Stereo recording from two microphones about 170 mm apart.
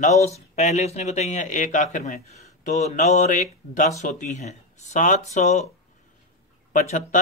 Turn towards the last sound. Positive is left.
turn(degrees=45)  # may be behind; listen again after turning